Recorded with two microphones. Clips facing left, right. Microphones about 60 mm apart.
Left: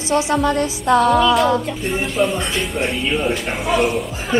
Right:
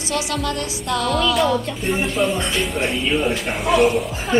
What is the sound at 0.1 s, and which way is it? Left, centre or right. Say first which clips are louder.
Speech: left 7 dB; left.